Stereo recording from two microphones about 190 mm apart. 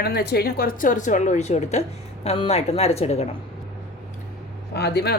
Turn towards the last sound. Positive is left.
turn(degrees=60)  # may be behind; listen again after turning